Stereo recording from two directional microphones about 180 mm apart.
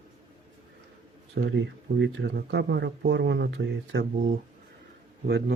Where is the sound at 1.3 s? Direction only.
75° right (ahead or behind).